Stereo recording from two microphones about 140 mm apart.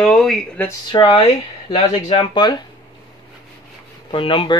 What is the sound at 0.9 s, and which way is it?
Speech, 40° left (ahead or behind).